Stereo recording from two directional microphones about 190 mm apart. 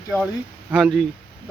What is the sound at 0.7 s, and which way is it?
Speech, centre (ahead or behind).